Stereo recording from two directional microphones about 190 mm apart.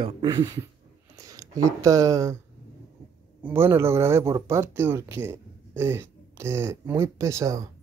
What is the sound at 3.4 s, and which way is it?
Speech, 10° right (ahead or behind).